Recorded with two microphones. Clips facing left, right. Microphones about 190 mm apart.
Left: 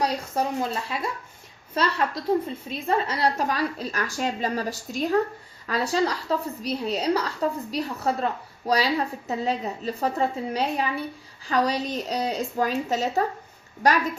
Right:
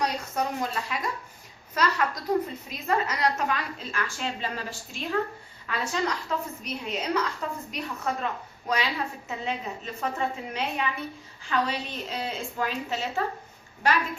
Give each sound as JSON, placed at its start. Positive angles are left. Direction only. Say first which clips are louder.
{"t": 0.0, "sound": "a woman's voice", "louder": "left 3 dB", "side_deg": 30}